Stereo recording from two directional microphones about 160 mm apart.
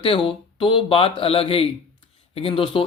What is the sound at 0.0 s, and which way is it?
Speech, 35° left (ahead or behind).